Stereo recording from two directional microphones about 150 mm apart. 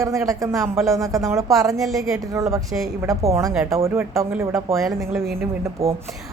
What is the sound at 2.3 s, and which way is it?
A woman's voice, 20° right (ahead or behind).